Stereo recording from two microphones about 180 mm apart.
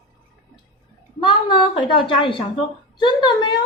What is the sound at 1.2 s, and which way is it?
A woman's voice, 25° left (ahead or behind).